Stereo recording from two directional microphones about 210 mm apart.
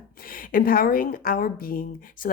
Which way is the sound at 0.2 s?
45° left (ahead or behind).